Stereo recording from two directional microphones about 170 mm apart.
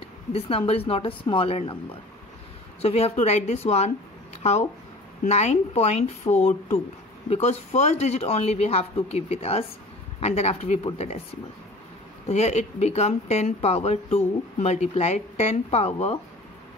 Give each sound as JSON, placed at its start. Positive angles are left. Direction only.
{"t": 0.3, "sound": "speech", "side_deg": 35}
{"t": 12.3, "sound": "speech", "side_deg": 40}